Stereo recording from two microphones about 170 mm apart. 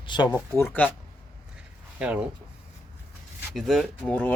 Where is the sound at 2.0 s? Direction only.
5° right (ahead or behind).